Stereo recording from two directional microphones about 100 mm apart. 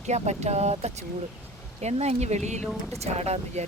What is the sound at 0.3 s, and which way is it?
Speech, 90° right.